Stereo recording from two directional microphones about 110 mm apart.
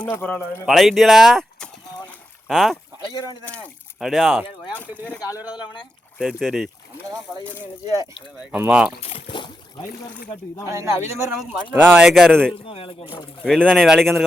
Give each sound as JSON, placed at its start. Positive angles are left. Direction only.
{"t": 0.2, "sound": "speech", "side_deg": 10}
{"t": 0.6, "sound": "speech", "side_deg": 0}
{"t": 3.4, "sound": "speech", "side_deg": 10}
{"t": 4.0, "sound": "speech", "side_deg": 0}
{"t": 5.3, "sound": "speech", "side_deg": -15}
{"t": 6.1, "sound": "speech", "side_deg": -5}
{"t": 8.5, "sound": "speech", "side_deg": -10}
{"t": 9.0, "sound": "boat", "side_deg": 60}
{"t": 10.7, "sound": "speech", "side_deg": -25}
{"t": 11.0, "sound": "speech", "side_deg": 90}
{"t": 11.3, "sound": "speech", "side_deg": -15}
{"t": 12.1, "sound": "speech", "side_deg": 5}
{"t": 12.6, "sound": "speech", "side_deg": 60}
{"t": 13.4, "sound": "speech", "side_deg": 10}